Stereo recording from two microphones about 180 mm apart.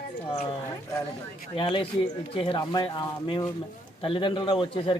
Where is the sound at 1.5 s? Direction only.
30° left (ahead or behind).